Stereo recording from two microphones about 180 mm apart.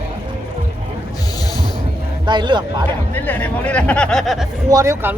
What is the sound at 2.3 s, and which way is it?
Speech, 25° right (ahead or behind).